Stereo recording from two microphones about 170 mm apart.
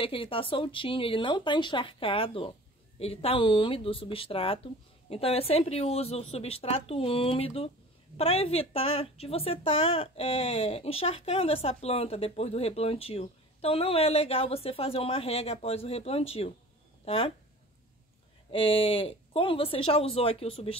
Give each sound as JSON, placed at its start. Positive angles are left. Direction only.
{"t": 0.0, "sound": "a woman's voice", "side_deg": 30}
{"t": 18.5, "sound": "a woman's voice", "side_deg": 35}